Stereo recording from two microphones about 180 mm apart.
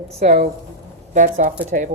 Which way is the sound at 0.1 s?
35° right (ahead or behind).